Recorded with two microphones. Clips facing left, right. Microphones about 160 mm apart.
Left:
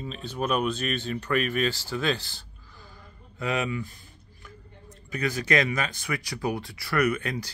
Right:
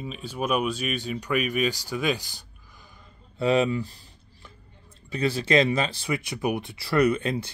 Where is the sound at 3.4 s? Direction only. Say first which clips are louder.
Right 6 dB; 30° right (ahead or behind).